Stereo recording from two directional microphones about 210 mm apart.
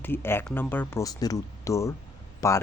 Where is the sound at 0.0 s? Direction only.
10° left (ahead or behind).